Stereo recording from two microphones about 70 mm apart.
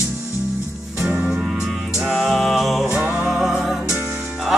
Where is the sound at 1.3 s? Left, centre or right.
Centre.